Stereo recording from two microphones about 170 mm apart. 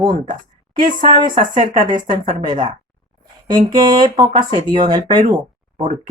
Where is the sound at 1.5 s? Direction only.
50° right (ahead or behind).